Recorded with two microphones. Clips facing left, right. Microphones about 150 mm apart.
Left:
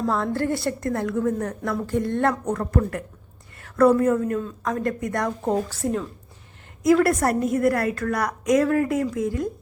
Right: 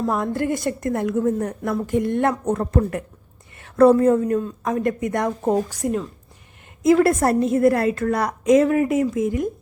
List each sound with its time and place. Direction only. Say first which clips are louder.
0.0 s a woman's voice: right 1 dB; 15° right (ahead or behind)
4.4 s a woman's voice: right 3 dB; 15° right (ahead or behind)